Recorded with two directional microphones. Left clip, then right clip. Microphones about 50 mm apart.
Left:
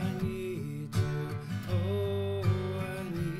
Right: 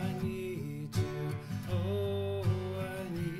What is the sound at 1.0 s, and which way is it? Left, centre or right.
Music, left.